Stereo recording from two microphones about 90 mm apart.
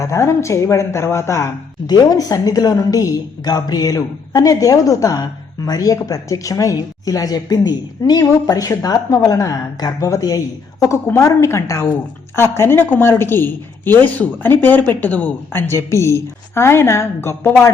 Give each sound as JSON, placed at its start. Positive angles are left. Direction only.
{"t": 0.0, "sound": "a woman's voice", "side_deg": 35}
{"t": 1.9, "sound": "a woman's voice", "side_deg": 45}